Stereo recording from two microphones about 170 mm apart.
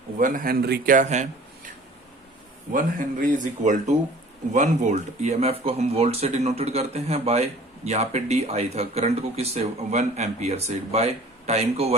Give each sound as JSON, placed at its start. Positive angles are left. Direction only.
{"t": 0.2, "sound": "speech", "side_deg": -50}
{"t": 2.7, "sound": "speech", "side_deg": -50}